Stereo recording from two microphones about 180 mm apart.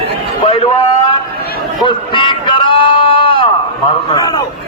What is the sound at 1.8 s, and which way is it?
A man's voice, 25° left (ahead or behind).